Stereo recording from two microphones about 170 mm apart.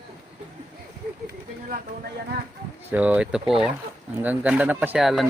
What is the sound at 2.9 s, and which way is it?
Speech, 10° right (ahead or behind).